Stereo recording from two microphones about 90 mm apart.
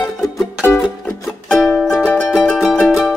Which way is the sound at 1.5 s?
5° left (ahead or behind).